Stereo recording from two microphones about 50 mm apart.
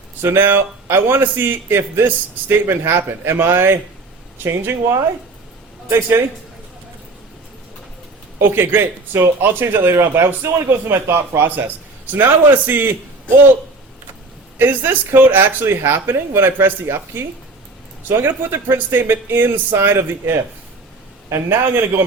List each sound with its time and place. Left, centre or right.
0.2 s speech: right
5.9 s speech: right
8.4 s speech: right
14.6 s speech: right
21.5 s speech: right